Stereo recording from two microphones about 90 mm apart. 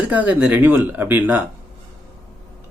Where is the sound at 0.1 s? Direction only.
15° right (ahead or behind).